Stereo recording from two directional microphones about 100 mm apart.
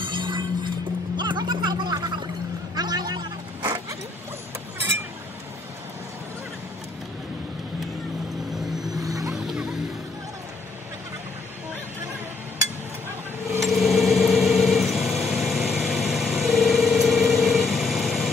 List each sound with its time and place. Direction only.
0.0 s music: 55° right (ahead or behind)
2.7 s a sound: 45° right (ahead or behind)
9.0 s vehicle: 35° right (ahead or behind)
9.3 s music: 5° right (ahead or behind)
13.6 s vehicle: centre (ahead or behind)